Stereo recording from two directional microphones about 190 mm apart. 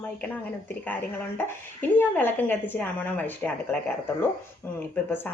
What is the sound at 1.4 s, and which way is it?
A woman's voice, 10° left (ahead or behind).